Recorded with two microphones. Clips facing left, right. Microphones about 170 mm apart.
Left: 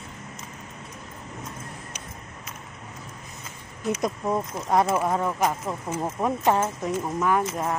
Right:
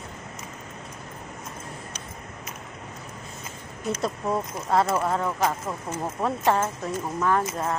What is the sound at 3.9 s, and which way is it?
Speech, 15° left (ahead or behind).